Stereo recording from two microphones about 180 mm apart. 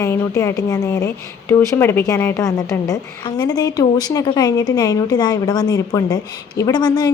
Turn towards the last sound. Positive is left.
turn(degrees=20)  # may be behind; listen again after turning